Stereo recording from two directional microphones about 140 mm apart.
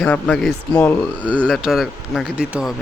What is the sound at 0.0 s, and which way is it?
A man's voice, 5° left (ahead or behind).